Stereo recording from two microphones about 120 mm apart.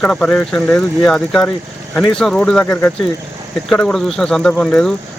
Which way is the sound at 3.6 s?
5° left (ahead or behind).